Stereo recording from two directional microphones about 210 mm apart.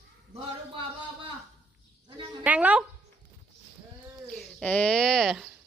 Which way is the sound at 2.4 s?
5° right (ahead or behind).